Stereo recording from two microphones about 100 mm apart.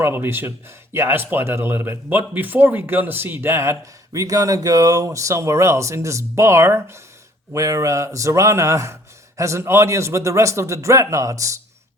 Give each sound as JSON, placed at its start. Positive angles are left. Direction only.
{"t": 0.0, "sound": "a man's voice", "side_deg": -20}